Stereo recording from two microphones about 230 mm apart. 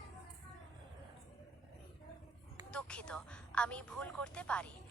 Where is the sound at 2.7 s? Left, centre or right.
Centre.